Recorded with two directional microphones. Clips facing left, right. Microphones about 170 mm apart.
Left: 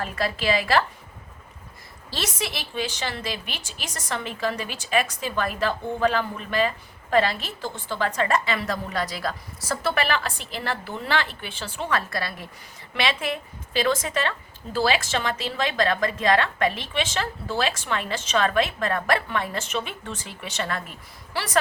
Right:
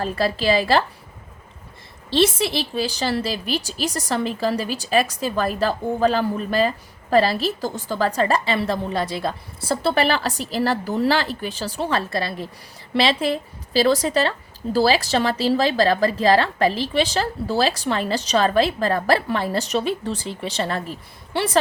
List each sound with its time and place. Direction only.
0.0 s a woman's voice: 30° right (ahead or behind)
2.0 s a woman's voice: 30° right (ahead or behind)